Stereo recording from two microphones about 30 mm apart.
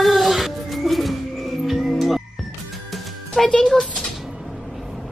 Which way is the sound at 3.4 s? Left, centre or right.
Left.